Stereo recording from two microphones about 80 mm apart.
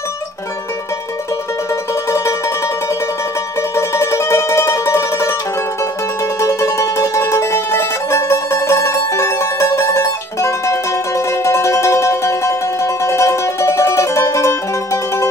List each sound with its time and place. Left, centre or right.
2.0 s music: left
3.7 s mandolin: left
6.4 s music: left